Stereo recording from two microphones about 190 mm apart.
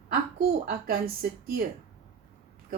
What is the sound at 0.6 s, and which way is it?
Speech, 50° right (ahead or behind).